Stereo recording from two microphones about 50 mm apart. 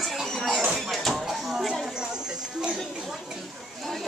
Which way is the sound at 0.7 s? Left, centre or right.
Centre.